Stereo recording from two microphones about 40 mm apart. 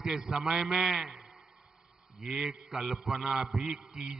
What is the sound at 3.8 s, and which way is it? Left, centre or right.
Speech, right.